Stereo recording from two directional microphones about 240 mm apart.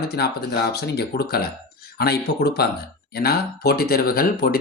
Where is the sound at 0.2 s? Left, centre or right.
Left.